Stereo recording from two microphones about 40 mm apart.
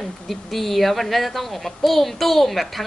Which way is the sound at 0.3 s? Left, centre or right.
Centre.